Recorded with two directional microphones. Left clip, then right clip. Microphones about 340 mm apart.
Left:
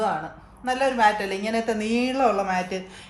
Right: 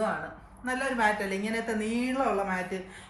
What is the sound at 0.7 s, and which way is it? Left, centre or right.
A woman's voice, left.